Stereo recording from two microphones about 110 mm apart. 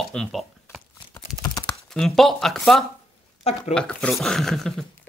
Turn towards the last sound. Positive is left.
turn(degrees=0)  # may be behind; listen again after turning